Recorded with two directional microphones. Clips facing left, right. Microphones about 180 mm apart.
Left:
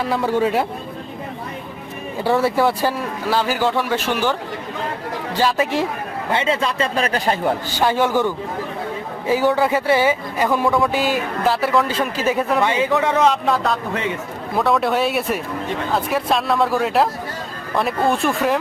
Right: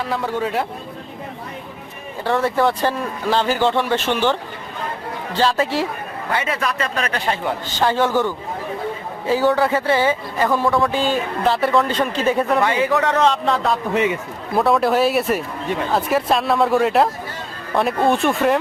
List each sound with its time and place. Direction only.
0.0 s a man's voice: 5° left (ahead or behind)
2.2 s a man's voice: 5° left (ahead or behind); by 7.5 s 35° left (ahead or behind)
7.7 s a man's voice: 10° left (ahead or behind)
12.6 s a man's voice: 20° left (ahead or behind)
13.4 s speech: centre (ahead or behind)